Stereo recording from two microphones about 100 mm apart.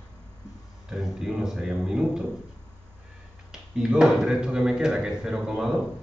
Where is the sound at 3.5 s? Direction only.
5° right (ahead or behind).